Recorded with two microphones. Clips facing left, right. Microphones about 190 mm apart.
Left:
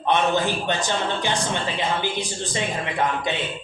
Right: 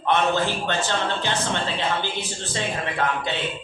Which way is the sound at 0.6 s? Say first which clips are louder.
Even; 15° left (ahead or behind).